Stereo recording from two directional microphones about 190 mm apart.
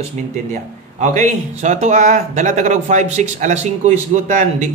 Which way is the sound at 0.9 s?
40° right (ahead or behind).